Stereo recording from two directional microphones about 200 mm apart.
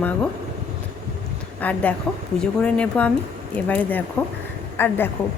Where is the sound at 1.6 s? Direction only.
5° left (ahead or behind).